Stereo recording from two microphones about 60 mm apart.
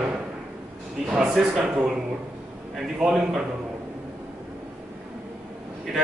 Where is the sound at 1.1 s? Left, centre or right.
Centre.